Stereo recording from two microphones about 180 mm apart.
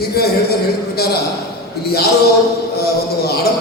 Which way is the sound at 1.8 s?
60° left (ahead or behind).